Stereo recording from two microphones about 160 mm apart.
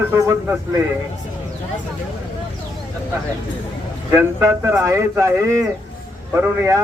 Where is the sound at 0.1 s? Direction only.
20° right (ahead or behind).